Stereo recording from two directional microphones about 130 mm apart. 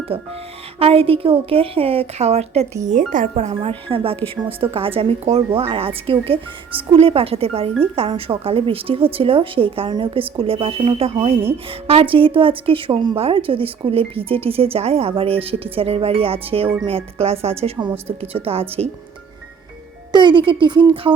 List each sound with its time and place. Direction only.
0.1 s a woman's voice: 45° right (ahead or behind)
3.1 s a woman's voice: 75° right (ahead or behind); by 18.9 s 50° right (ahead or behind)
20.1 s a woman's voice: 35° right (ahead or behind)